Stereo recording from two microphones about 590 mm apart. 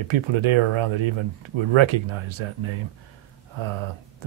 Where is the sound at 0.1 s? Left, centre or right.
Right.